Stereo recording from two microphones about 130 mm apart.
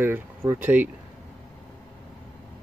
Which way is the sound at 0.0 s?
20° right (ahead or behind).